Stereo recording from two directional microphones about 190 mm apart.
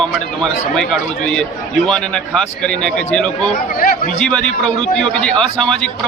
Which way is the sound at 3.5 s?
40° left (ahead or behind).